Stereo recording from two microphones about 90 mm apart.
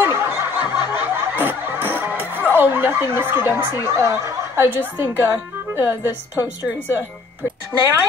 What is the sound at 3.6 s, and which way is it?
Speech, 45° left (ahead or behind).